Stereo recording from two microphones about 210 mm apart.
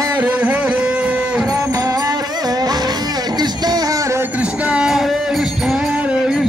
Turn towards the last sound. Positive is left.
turn(degrees=-5)  # may be behind; listen again after turning